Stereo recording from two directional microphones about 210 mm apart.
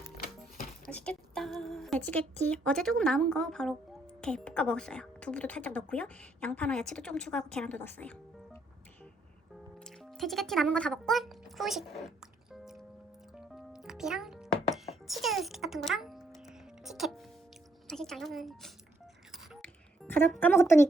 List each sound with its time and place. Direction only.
0.2 s a sound: 45° left (ahead or behind)
0.9 s a sound: 5° left (ahead or behind)
2.4 s speech: 5° left (ahead or behind)
9.8 s music: centre (ahead or behind)
17.8 s speech: centre (ahead or behind)
19.3 s music: 5° left (ahead or behind)